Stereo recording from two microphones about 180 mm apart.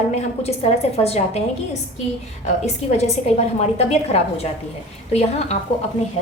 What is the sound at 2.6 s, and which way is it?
A woman's voice, 40° left (ahead or behind).